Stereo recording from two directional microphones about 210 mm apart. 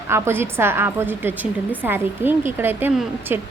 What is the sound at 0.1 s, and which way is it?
A woman's voice, 10° right (ahead or behind).